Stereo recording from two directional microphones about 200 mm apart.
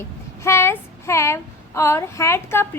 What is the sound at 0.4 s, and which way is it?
A woman's voice, 15° left (ahead or behind).